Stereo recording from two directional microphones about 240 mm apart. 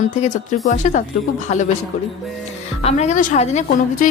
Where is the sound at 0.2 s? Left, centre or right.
Left.